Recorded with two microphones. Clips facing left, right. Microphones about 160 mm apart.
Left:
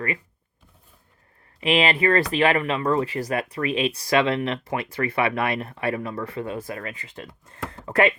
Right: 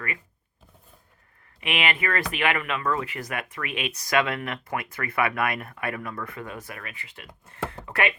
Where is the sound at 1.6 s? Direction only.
35° left (ahead or behind).